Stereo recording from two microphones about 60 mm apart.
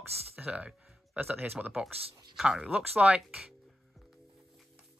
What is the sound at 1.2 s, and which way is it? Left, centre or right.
Speech, right.